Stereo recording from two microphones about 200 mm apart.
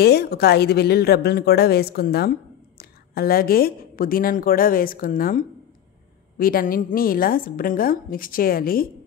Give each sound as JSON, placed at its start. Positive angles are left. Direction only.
{"t": 0.0, "sound": "a woman's voice", "side_deg": 55}